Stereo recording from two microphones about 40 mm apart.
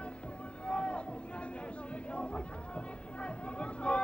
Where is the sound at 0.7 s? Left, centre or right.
Left.